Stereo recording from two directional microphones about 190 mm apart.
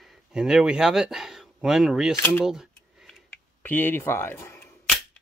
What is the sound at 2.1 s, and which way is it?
Speech, 10° left (ahead or behind).